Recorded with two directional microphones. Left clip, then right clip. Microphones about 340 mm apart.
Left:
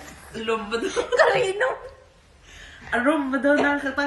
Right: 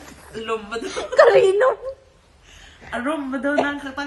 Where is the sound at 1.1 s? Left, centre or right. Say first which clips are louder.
Right 7 dB; centre.